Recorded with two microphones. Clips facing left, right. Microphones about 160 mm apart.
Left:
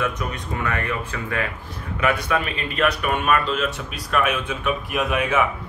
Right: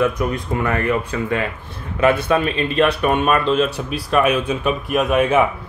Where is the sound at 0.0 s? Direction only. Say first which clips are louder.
Right 7 dB; 35° right (ahead or behind).